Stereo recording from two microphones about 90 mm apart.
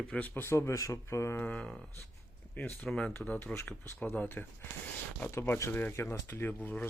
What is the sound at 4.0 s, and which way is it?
Speech, 15° left (ahead or behind).